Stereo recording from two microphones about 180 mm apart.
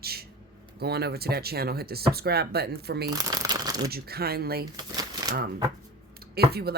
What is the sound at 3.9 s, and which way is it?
Speech, 60° right (ahead or behind).